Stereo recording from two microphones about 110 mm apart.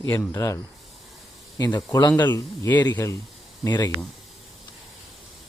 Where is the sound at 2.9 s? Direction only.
25° left (ahead or behind).